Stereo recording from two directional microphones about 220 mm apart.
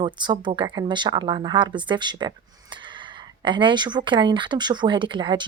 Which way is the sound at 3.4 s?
20° right (ahead or behind).